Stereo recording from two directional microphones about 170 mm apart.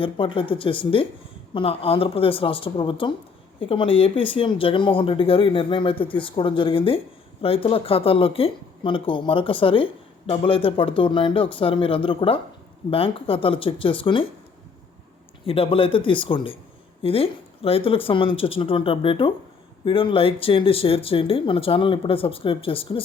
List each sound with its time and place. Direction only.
0.0 s a woman's voice: 30° left (ahead or behind)
15.4 s a woman's voice: 35° left (ahead or behind)